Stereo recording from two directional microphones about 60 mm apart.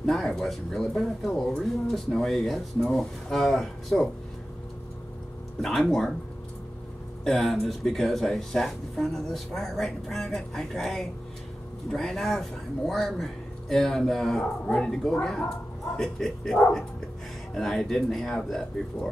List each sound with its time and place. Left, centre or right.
0.0 s speech: centre
5.6 s speech: centre
7.2 s speech: centre